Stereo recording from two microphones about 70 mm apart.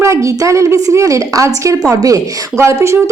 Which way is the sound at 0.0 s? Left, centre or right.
Right.